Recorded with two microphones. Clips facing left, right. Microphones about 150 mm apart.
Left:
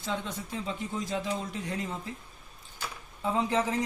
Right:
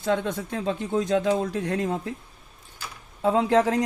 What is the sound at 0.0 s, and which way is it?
Speech, 70° right (ahead or behind).